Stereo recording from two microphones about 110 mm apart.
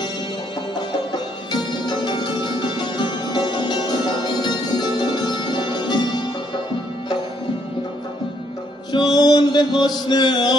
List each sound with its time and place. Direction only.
0.7 s music: 45° left (ahead or behind)
8.9 s mantra: 40° left (ahead or behind)